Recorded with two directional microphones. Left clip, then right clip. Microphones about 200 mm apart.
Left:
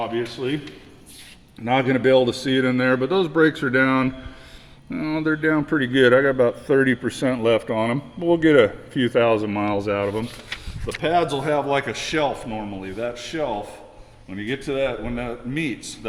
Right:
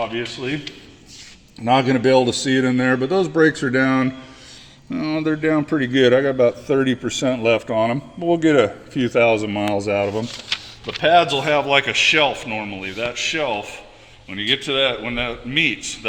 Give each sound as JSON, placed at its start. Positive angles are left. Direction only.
{"t": 0.0, "sound": "speech", "side_deg": -15}
{"t": 1.6, "sound": "a man's voice", "side_deg": -35}
{"t": 11.3, "sound": "a man's voice", "side_deg": -10}